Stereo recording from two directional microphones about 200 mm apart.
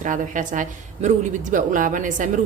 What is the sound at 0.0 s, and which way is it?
A woman's voice, 40° right (ahead or behind).